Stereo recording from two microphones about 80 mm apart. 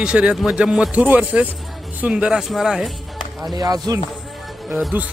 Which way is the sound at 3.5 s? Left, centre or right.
Right.